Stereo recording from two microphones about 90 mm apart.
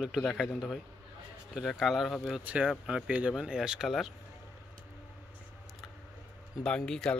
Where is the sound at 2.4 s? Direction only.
15° right (ahead or behind).